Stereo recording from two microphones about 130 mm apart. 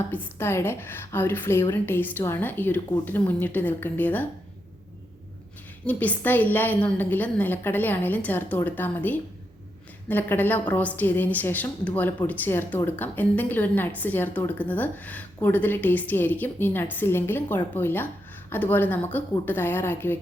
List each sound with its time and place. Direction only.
0.1 s a woman's voice: 20° left (ahead or behind)
5.8 s a woman's voice: 10° left (ahead or behind)